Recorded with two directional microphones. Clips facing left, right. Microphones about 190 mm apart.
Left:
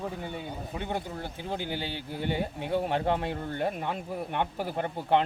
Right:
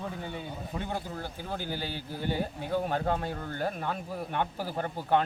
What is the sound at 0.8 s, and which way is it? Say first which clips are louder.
A man's voice: left 3 dB; 20° left (ahead or behind).